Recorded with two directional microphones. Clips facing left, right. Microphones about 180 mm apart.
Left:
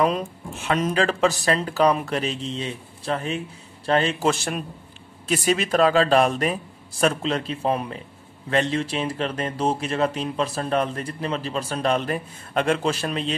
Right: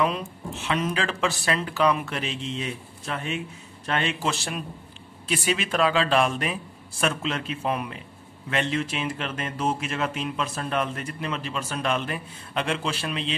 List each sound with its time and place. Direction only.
0.0 s speech: 45° left (ahead or behind)